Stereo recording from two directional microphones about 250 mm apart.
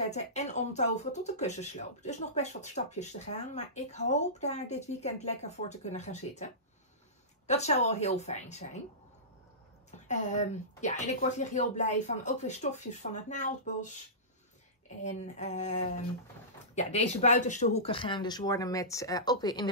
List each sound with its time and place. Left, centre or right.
0.0 s speech: left
9.8 s speech: left
15.0 s speech: left